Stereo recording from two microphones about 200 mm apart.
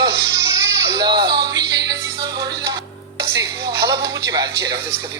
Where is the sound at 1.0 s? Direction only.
20° right (ahead or behind).